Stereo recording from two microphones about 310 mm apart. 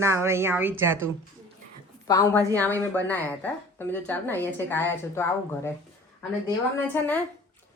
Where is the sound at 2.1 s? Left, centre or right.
Centre.